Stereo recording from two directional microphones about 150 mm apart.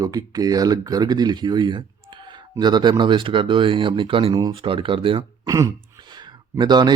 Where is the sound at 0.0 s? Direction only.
25° right (ahead or behind).